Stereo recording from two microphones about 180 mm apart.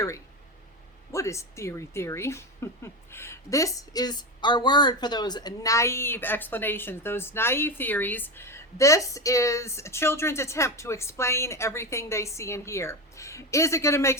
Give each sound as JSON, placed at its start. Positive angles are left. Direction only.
{"t": 1.1, "sound": "a woman's voice", "side_deg": 15}